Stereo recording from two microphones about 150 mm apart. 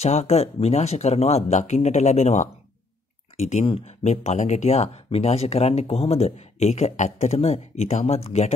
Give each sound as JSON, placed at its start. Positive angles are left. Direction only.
{"t": 0.0, "sound": "speech", "side_deg": 45}